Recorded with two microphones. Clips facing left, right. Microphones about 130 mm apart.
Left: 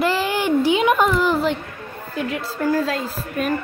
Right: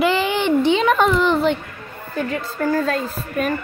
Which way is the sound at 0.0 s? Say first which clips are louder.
Right 2 dB; centre (ahead or behind).